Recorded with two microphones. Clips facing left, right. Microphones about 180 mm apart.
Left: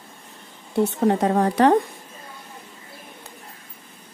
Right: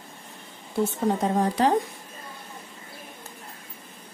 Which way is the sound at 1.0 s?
65° left (ahead or behind).